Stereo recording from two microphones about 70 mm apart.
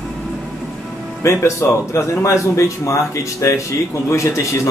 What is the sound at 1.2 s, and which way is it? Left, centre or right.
Speech, left.